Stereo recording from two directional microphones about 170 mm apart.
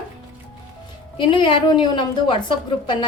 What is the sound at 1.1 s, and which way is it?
A woman's voice, 30° left (ahead or behind).